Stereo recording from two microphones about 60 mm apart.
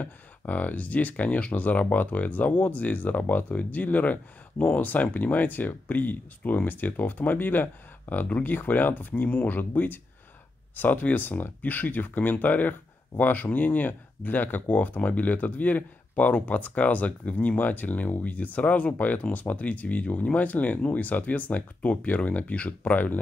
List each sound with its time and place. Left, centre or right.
0.0 s speech: left